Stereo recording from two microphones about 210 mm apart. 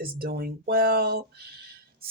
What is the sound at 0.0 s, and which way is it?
Speech, 45° right (ahead or behind).